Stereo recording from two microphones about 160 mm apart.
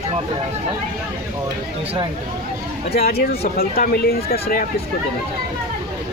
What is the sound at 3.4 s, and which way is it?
Speech, 75° left (ahead or behind).